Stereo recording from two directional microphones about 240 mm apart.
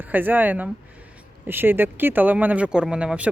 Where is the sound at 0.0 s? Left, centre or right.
Centre.